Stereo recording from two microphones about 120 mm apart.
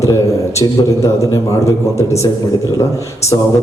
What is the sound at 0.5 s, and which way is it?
A man's voice, 25° left (ahead or behind).